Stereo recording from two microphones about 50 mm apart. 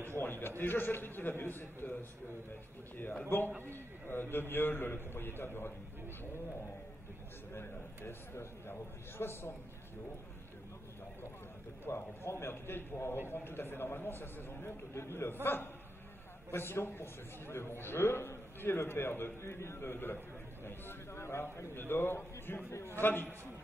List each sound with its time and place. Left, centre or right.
0.2 s a man's voice: left
3.3 s a man's voice: left
7.5 s a man's voice: left
11.9 s a man's voice: left
22.7 s a man's voice: left
22.9 s a man's voice: left